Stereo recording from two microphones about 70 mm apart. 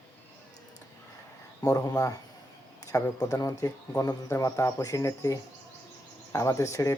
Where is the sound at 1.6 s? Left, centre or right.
Left.